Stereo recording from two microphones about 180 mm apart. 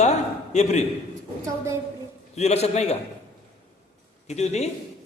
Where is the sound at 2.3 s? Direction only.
35° left (ahead or behind).